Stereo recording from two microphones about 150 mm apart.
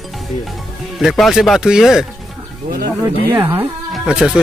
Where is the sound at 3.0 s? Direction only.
20° right (ahead or behind).